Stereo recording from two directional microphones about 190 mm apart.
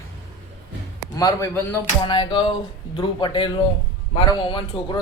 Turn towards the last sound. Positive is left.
turn(degrees=25)  # may be behind; listen again after turning